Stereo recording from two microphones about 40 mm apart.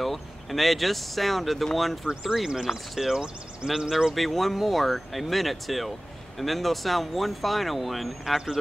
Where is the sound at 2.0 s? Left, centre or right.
Centre.